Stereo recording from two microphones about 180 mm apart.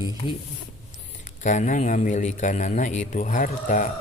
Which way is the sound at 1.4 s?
45° left (ahead or behind).